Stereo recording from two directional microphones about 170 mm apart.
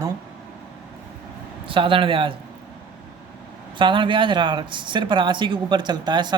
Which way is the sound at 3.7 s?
30° right (ahead or behind).